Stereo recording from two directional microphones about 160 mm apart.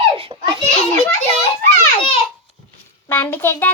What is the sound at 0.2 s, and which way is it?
Children playing, 30° right (ahead or behind).